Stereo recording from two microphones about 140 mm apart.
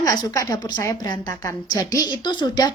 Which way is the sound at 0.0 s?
25° left (ahead or behind).